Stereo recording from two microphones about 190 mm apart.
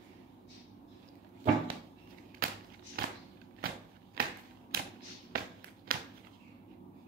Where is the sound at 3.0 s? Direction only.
50° right (ahead or behind).